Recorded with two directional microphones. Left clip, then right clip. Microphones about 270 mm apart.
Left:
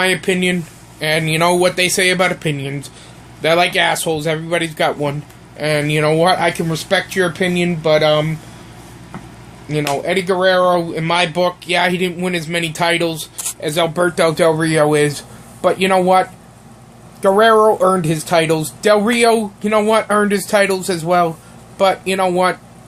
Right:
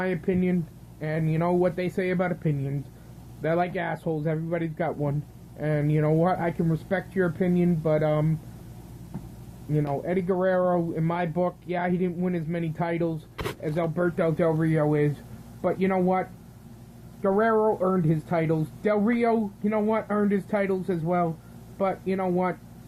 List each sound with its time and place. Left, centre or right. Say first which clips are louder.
0.0 s speech: left 12 dB; centre
9.7 s speech: left 10 dB; centre
17.2 s speech: left 12 dB; centre